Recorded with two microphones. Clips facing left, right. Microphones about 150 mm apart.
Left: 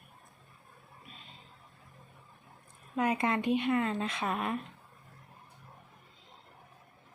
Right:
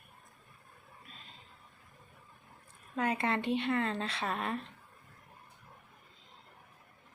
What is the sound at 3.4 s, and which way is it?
A woman's voice, 15° left (ahead or behind).